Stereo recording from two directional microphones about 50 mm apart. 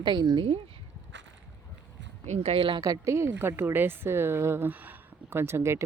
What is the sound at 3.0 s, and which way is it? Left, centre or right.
Speech, right.